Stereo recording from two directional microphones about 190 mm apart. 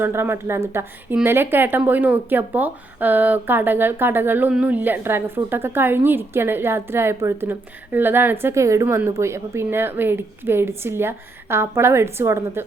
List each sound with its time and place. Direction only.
0.0 s speech: 10° right (ahead or behind)